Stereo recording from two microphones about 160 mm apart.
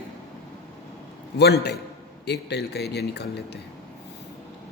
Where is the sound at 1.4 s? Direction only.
90° left.